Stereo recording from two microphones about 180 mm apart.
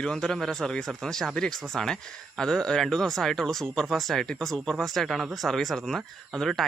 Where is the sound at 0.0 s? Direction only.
5° left (ahead or behind).